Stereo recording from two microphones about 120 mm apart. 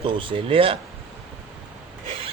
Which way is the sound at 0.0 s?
45° right (ahead or behind).